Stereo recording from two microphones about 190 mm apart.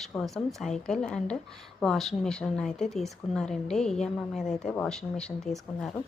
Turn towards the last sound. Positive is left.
turn(degrees=0)  # may be behind; listen again after turning